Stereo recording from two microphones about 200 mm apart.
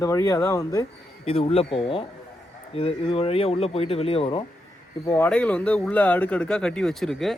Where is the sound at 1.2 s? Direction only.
30° left (ahead or behind).